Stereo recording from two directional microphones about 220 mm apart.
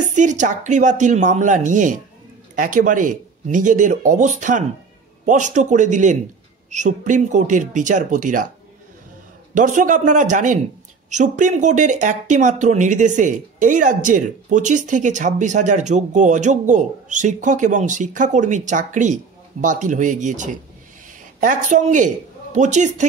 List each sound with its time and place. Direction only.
0.0 s speech: 35° right (ahead or behind)
9.5 s a woman's voice: 35° right (ahead or behind)